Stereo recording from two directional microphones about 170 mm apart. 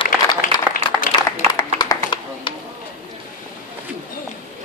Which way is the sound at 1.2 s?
20° left (ahead or behind).